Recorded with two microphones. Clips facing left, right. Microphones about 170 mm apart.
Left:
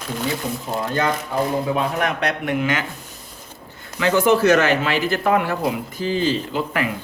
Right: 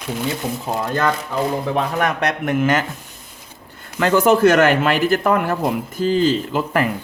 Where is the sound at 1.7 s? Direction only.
45° right (ahead or behind).